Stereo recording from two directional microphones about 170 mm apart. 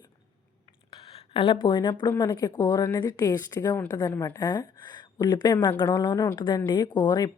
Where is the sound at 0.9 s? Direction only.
30° left (ahead or behind).